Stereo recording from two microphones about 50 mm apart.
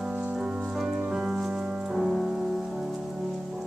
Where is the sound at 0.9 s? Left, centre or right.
Right.